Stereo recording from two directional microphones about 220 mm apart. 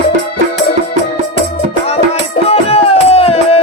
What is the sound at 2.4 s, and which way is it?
Music, 25° left (ahead or behind).